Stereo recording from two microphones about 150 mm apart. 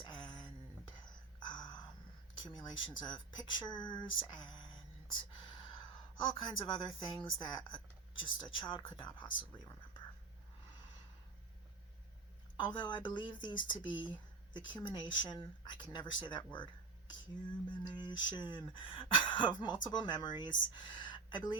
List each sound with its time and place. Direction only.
0.0 s a sound: 30° left (ahead or behind)
2.3 s a woman's voice: 30° left (ahead or behind)
12.5 s speech: 30° left (ahead or behind)
17.8 s speech: 30° left (ahead or behind)